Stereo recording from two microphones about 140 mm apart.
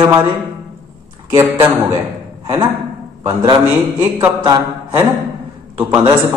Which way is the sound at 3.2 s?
20° right (ahead or behind).